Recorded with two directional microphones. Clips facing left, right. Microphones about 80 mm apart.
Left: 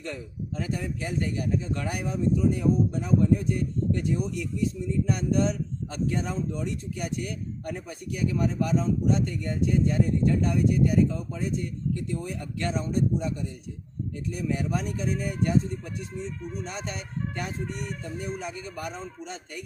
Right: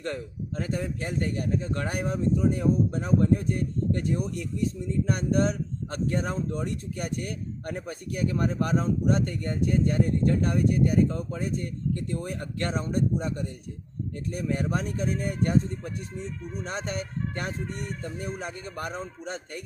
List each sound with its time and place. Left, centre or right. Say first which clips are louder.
0.0 s speech: right 3 dB; right